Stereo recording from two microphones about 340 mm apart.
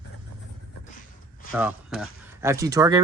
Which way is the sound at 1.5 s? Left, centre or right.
Centre.